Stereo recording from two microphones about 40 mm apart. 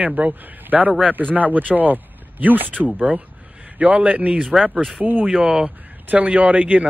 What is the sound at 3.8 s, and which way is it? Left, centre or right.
Speech, right.